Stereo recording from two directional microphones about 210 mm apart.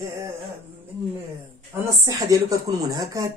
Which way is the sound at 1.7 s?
15° right (ahead or behind).